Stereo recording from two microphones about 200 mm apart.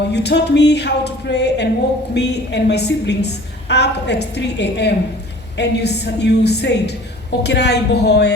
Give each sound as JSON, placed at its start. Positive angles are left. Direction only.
{"t": 0.1, "sound": "a woman's voice", "side_deg": 55}